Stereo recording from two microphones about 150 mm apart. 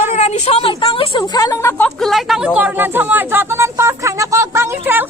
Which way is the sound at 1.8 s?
Centre (ahead or behind).